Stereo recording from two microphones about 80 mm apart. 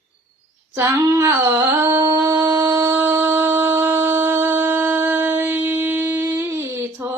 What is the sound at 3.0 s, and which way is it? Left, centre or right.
Shofar, right.